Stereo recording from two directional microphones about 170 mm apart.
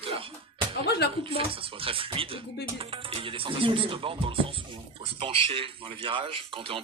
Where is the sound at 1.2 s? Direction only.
30° right (ahead or behind).